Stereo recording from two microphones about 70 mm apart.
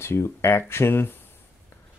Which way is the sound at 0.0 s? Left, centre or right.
Left.